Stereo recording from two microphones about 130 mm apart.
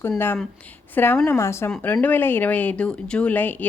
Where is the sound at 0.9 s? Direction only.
15° left (ahead or behind).